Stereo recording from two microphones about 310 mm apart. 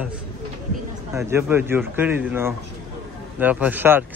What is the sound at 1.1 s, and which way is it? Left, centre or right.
A man's voice, centre.